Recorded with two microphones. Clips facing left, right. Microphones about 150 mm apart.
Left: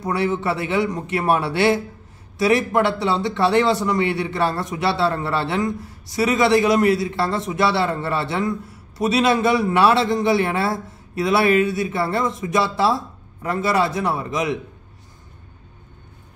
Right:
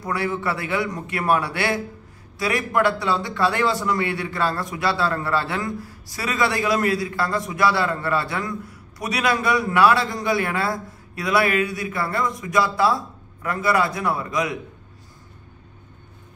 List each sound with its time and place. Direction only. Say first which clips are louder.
0.0 s a man's voice: left 3 dB; 25° left (ahead or behind)